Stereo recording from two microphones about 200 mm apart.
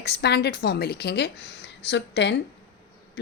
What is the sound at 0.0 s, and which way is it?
A woman's voice, 55° left (ahead or behind).